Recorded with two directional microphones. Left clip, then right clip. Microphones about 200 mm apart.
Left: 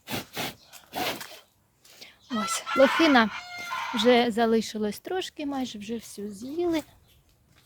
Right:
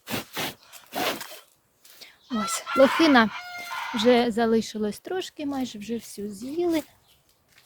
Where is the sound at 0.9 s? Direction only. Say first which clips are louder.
Right 3 dB; 40° right (ahead or behind).